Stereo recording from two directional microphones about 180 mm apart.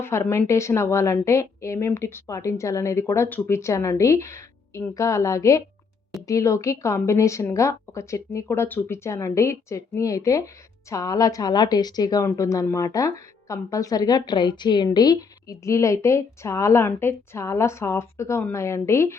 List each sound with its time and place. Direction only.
0.0 s a woman's voice: 15° left (ahead or behind)